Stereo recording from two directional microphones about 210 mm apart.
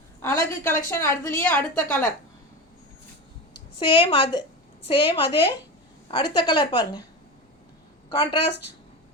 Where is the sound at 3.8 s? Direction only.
20° left (ahead or behind).